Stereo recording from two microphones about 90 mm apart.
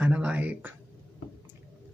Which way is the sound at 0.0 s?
15° right (ahead or behind).